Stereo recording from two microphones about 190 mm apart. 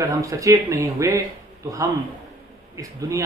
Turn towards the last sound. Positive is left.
turn(degrees=-15)  # may be behind; listen again after turning